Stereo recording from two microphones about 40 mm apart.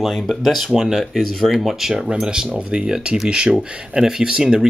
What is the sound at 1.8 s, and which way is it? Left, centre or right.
Speech, centre.